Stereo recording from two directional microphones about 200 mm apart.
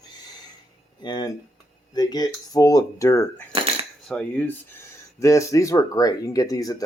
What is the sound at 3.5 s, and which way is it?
Coin, 30° right (ahead or behind).